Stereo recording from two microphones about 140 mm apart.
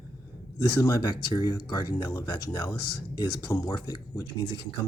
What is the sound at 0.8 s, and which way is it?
Speech, 30° left (ahead or behind).